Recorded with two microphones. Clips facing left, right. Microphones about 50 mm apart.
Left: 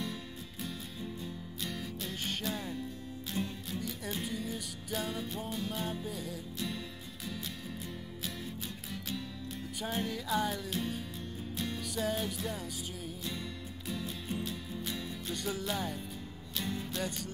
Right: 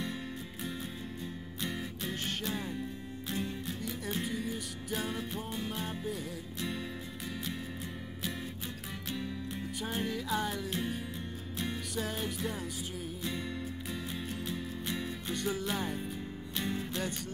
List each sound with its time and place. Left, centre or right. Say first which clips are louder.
1.2 s music: right 2 dB; centre
3.4 s music: left 1 dB; centre
3.8 s music: right 3 dB; centre
9.8 s music: even; centre
14.4 s music: right 1 dB; right